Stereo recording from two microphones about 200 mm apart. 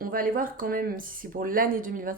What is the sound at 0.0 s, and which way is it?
Speech, 45° right (ahead or behind).